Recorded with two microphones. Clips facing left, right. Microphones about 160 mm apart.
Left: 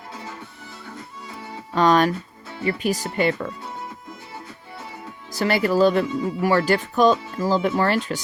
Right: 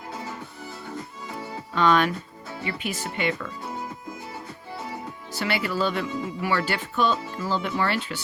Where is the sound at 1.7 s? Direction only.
40° left (ahead or behind).